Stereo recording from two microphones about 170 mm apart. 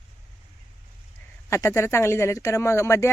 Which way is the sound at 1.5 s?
15° left (ahead or behind).